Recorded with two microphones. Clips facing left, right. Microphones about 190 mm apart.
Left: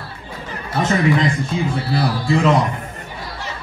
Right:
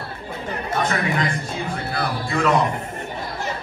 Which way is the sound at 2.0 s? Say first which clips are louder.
Left 5 dB; 25° left (ahead or behind).